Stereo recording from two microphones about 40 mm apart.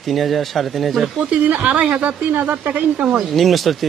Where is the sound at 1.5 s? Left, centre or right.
Right.